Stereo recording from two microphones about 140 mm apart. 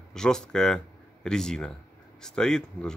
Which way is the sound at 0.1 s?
5° left (ahead or behind).